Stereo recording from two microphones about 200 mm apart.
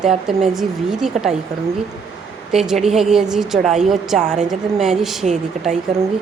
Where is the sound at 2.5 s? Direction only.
Centre (ahead or behind).